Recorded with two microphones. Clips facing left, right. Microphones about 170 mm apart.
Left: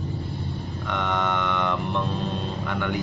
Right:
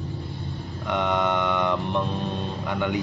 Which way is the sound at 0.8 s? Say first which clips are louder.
Right 3 dB; 15° right (ahead or behind).